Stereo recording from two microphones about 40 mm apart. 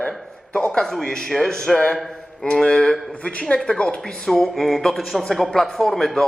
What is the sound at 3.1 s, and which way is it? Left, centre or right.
Speech, left.